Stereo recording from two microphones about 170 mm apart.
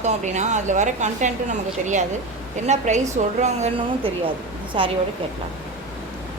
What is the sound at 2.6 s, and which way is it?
A woman's voice, 45° right (ahead or behind).